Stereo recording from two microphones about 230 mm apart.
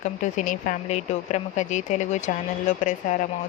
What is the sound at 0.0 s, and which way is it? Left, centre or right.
Speech, left.